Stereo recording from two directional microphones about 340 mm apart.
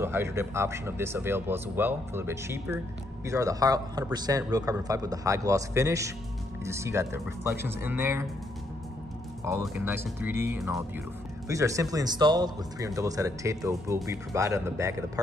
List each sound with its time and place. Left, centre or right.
0.0 s speech: centre
9.4 s speech: centre